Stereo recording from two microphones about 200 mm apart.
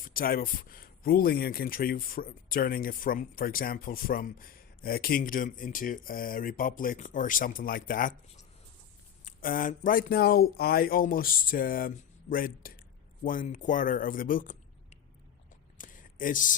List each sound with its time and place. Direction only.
0.0 s speech: 45° left (ahead or behind)
9.2 s speech: 45° left (ahead or behind)
15.8 s a sound: 40° left (ahead or behind)